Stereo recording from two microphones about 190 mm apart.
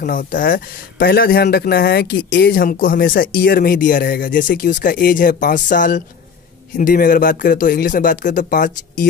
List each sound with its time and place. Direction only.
0.0 s speech: 50° left (ahead or behind)